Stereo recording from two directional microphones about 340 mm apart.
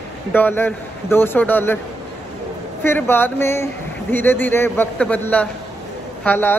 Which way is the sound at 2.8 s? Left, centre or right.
Centre.